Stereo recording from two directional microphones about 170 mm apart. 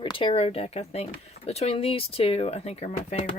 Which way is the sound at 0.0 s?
30° left (ahead or behind).